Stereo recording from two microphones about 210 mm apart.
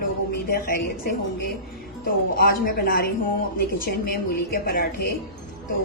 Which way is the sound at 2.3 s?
45° left (ahead or behind).